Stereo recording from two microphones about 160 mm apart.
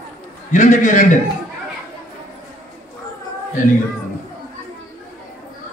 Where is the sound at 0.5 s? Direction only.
55° left (ahead or behind).